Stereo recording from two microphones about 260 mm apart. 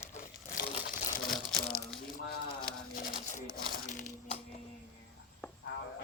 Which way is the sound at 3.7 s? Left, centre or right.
Left.